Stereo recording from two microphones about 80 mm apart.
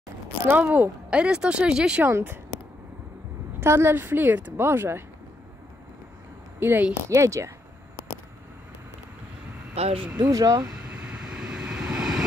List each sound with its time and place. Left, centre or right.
0.5 s speech: centre
2.0 s speech: right
3.5 s speech: right
6.6 s speech: right
7.1 s speech: right
10.1 s speech: right
10.9 s vehicle: centre